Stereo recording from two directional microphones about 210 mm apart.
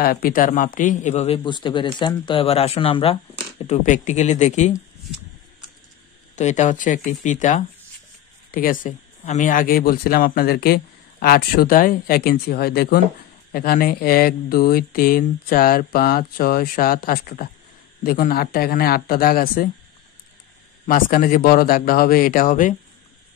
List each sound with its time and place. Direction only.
0.0 s speech: 45° left (ahead or behind)
6.3 s speech: 35° left (ahead or behind)
20.8 s speech: 40° left (ahead or behind)